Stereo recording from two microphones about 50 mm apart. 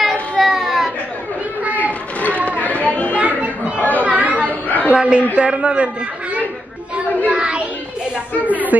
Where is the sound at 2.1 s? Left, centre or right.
Left.